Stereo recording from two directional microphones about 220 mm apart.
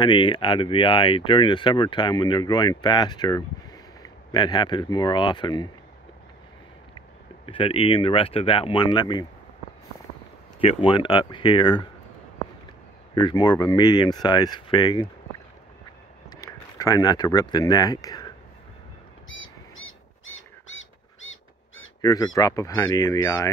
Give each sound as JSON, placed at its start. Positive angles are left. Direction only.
{"t": 0.0, "sound": "speech", "side_deg": 20}
{"t": 7.4, "sound": "speech", "side_deg": 25}
{"t": 10.6, "sound": "speech", "side_deg": 25}
{"t": 13.1, "sound": "speech", "side_deg": 20}
{"t": 16.3, "sound": "speech", "side_deg": 15}
{"t": 19.2, "sound": "bird flight", "side_deg": 60}
{"t": 22.0, "sound": "speech", "side_deg": 15}